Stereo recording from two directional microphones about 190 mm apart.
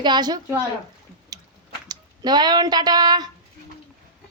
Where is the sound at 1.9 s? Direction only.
20° right (ahead or behind).